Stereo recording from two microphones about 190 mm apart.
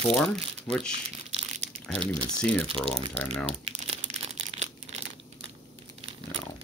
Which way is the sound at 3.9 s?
35° right (ahead or behind).